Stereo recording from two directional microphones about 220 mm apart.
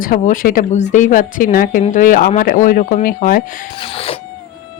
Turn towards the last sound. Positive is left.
turn(degrees=25)  # may be behind; listen again after turning